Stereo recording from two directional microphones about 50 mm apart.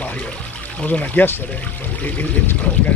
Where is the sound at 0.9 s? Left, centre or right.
Left.